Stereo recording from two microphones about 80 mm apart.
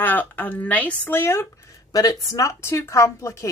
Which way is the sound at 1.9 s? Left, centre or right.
Left.